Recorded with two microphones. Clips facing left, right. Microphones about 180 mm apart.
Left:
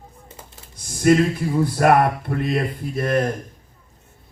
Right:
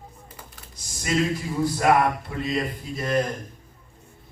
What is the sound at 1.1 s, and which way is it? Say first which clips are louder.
A man's voice: left 8 dB; 55° left (ahead or behind).